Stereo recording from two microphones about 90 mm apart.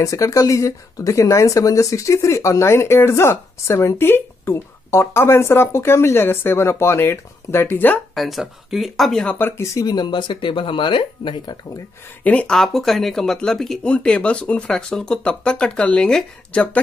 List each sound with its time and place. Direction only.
0.0 s speech: 40° left (ahead or behind); by 8.0 s 20° left (ahead or behind)
8.1 s speech: centre (ahead or behind)
9.8 s speech: 50° left (ahead or behind)
12.2 s speech: 15° left (ahead or behind)